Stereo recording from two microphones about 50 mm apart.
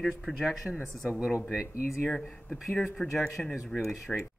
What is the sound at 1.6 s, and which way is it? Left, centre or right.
Speech, left.